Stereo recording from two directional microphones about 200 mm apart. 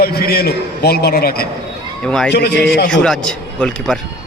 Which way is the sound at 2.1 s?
5° left (ahead or behind).